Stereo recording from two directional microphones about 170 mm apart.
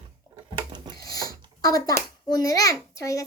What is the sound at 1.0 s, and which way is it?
A child's voice, 20° left (ahead or behind).